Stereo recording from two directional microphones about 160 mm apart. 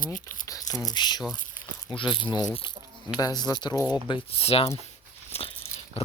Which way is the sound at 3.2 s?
25° left (ahead or behind).